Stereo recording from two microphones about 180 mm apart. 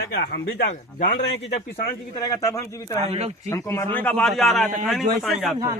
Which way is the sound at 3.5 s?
15° left (ahead or behind).